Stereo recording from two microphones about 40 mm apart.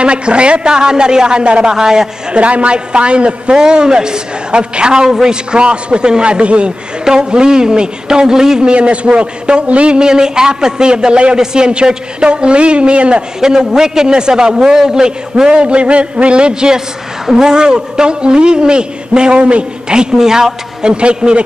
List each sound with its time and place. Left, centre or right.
0.0 s a man's voice: right
2.3 s a man's voice: right
9.9 s a man's voice: centre
13.4 s a man's voice: centre
20.9 s a man's voice: right